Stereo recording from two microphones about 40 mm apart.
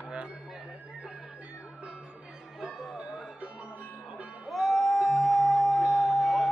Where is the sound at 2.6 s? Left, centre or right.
Centre.